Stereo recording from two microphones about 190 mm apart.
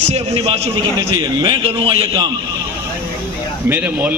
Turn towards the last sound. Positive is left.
turn(degrees=-10)  # may be behind; listen again after turning